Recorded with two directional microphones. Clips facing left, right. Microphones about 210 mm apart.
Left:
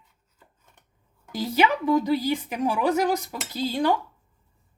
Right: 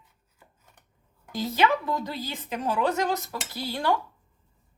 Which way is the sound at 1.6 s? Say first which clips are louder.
Left 4 dB; 15° left (ahead or behind).